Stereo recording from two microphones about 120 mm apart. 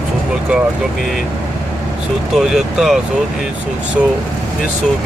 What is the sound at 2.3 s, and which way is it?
Speech, 5° right (ahead or behind).